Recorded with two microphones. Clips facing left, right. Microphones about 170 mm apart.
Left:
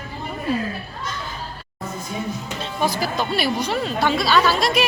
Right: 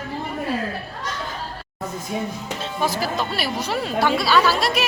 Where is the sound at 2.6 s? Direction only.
Centre (ahead or behind).